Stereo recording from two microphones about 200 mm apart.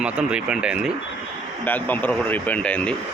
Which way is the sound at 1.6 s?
10° left (ahead or behind).